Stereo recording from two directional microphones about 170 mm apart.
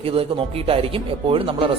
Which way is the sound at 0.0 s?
35° right (ahead or behind).